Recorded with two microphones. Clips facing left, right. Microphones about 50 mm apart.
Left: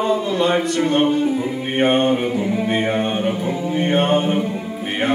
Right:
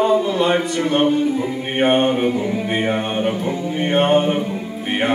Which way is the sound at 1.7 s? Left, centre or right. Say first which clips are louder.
Right 1 dB; centre.